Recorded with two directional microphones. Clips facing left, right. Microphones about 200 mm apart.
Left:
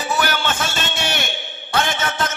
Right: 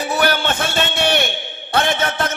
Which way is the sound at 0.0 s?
60° right (ahead or behind).